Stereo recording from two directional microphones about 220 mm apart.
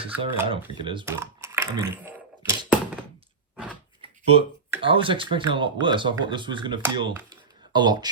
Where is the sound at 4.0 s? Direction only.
25° right (ahead or behind).